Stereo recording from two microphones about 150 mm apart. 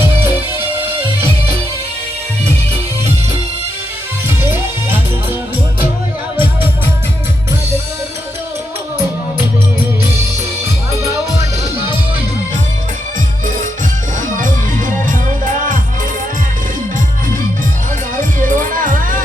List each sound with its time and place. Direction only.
4.3 s music: 15° right (ahead or behind)
14.3 s music: 65° right (ahead or behind)
18.2 s music: 60° right (ahead or behind)